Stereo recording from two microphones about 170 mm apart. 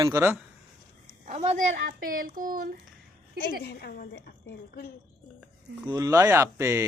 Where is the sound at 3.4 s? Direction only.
65° left (ahead or behind).